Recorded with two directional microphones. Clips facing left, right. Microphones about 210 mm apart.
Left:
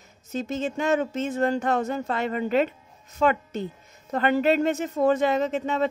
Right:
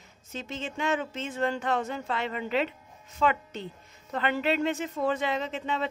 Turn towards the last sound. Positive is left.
turn(degrees=45)  # may be behind; listen again after turning